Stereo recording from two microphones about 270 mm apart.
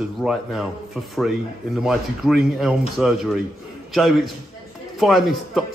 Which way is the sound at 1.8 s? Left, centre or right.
Centre.